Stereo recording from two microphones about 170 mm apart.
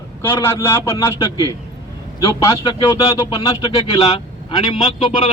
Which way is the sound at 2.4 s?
20° left (ahead or behind).